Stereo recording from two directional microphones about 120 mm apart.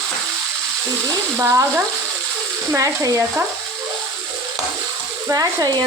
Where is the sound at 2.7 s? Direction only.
30° right (ahead or behind).